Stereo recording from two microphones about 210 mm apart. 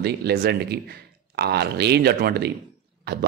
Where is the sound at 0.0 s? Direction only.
50° right (ahead or behind).